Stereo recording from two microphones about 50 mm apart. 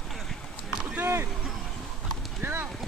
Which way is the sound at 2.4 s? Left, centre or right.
Right.